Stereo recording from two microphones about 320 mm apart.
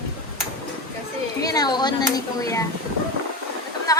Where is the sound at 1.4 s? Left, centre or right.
Centre.